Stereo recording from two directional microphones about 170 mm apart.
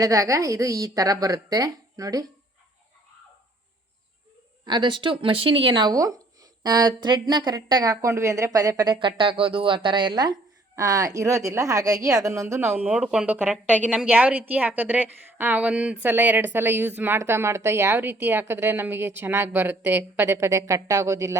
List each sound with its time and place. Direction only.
0.0 s speech: 20° right (ahead or behind)
4.6 s a woman's voice: 25° right (ahead or behind)